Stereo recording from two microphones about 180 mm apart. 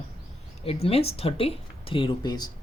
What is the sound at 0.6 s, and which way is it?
Speech, 35° left (ahead or behind).